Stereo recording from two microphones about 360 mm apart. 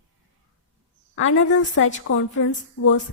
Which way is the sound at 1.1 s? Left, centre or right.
Left.